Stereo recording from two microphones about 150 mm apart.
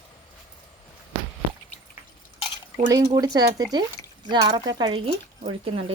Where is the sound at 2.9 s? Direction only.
25° right (ahead or behind).